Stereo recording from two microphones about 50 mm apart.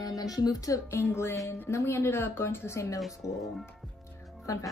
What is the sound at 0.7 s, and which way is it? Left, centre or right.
A woman's voice, left.